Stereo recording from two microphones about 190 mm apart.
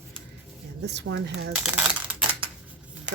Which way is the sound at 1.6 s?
5° right (ahead or behind).